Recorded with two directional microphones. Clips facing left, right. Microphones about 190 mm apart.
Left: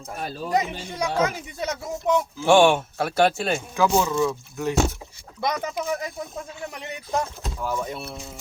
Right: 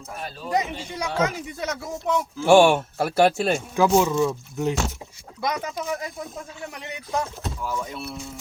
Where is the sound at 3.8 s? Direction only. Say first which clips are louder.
Right 2 dB; 15° right (ahead or behind).